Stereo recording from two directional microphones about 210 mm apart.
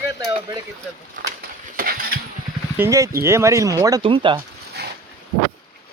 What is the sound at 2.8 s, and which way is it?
Speech, 15° right (ahead or behind).